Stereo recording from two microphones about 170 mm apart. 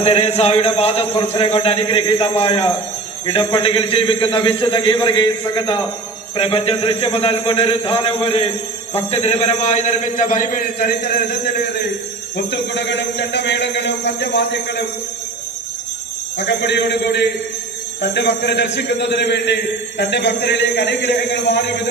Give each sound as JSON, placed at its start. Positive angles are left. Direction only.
{"t": 0.0, "sound": "a man's voice", "side_deg": 35}
{"t": 13.1, "sound": "a man's voice", "side_deg": 90}
{"t": 16.4, "sound": "a man's voice", "side_deg": 90}